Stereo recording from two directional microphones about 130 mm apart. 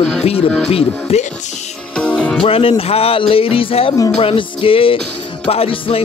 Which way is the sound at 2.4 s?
45° left (ahead or behind).